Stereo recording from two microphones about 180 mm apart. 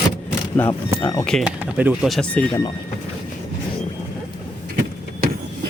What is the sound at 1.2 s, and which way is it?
Speech, 5° left (ahead or behind).